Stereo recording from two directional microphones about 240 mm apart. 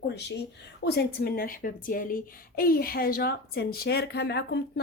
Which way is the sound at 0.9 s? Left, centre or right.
Left.